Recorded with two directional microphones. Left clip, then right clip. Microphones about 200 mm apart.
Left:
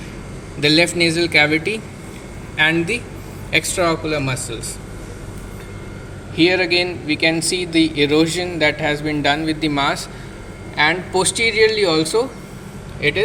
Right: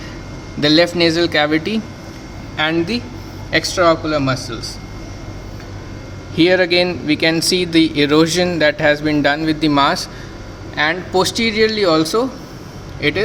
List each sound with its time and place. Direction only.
0.6 s speech: 35° right (ahead or behind)
6.3 s speech: 35° right (ahead or behind)